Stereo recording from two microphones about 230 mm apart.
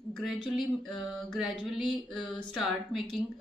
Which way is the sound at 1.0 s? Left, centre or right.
Centre.